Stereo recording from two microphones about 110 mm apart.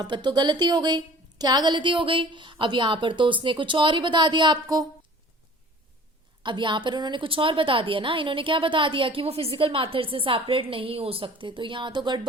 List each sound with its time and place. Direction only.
0.0 s a woman's voice: 40° right (ahead or behind)
6.4 s a woman's voice: 45° right (ahead or behind)